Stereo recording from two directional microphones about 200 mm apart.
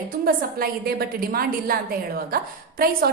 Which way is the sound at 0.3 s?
50° right (ahead or behind).